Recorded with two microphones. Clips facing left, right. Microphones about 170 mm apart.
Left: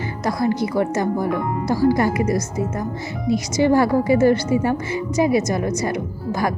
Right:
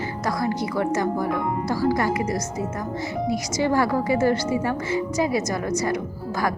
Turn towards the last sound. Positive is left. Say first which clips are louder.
# left 5 dB
turn(degrees=25)  # may be behind; listen again after turning